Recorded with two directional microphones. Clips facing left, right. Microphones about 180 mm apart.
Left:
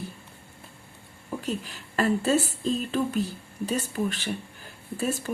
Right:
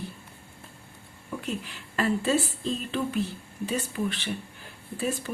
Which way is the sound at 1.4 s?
40° left (ahead or behind).